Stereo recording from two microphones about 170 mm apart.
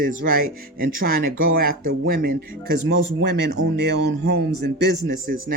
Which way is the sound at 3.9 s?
75° right (ahead or behind).